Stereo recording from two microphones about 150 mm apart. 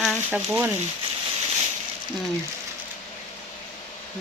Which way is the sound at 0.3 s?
10° right (ahead or behind).